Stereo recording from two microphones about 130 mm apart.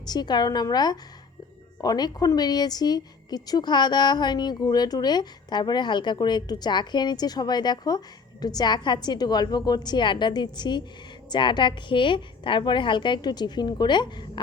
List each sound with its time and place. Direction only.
0.0 s a woman's voice: 30° left (ahead or behind)